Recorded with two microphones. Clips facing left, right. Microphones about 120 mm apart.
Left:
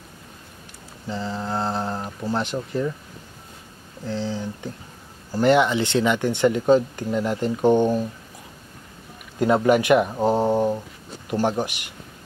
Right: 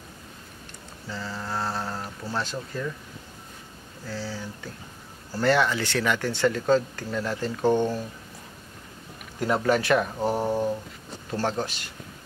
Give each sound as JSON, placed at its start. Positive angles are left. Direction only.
{"t": 1.0, "sound": "speech", "side_deg": 20}
{"t": 4.0, "sound": "speech", "side_deg": 20}
{"t": 9.4, "sound": "speech", "side_deg": 20}